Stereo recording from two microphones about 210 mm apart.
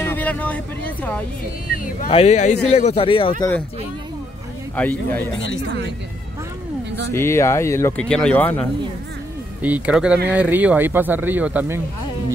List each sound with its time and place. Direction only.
0.0 s speech: 10° left (ahead or behind)
2.0 s speech: 30° left (ahead or behind)
4.7 s speech: 10° left (ahead or behind)
7.1 s speech: 10° left (ahead or behind)
9.6 s speech: 5° right (ahead or behind)